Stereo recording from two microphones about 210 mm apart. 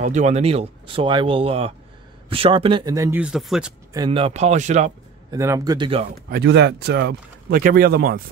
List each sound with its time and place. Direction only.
0.0 s speech: 35° right (ahead or behind); by 3.7 s centre (ahead or behind)
3.9 s speech: 20° right (ahead or behind)
5.3 s speech: 15° right (ahead or behind)
6.3 s speech: 50° right (ahead or behind)